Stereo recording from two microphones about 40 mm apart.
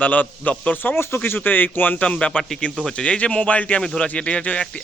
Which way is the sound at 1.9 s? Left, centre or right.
Left.